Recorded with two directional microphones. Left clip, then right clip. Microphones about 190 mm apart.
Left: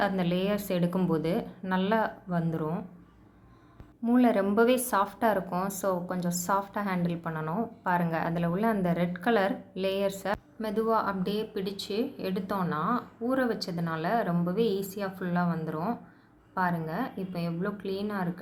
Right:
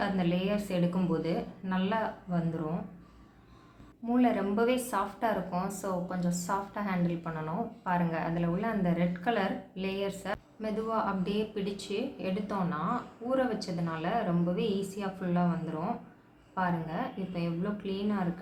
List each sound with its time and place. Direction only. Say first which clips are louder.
0.0 s a woman's voice: left 3 dB; 45° left (ahead or behind)
4.0 s a woman's voice: left 4 dB; 45° left (ahead or behind)